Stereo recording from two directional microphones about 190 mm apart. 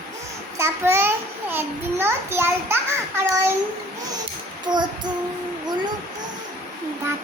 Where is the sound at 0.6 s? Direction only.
15° right (ahead or behind).